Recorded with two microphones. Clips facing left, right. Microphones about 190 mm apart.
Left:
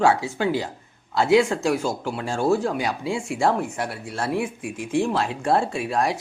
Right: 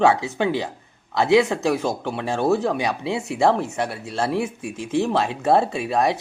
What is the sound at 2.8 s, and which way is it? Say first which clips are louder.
Speech: right 1 dB; 20° right (ahead or behind).